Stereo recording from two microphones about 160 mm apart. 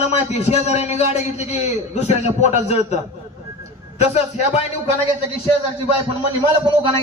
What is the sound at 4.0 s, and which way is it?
Speech, 40° left (ahead or behind).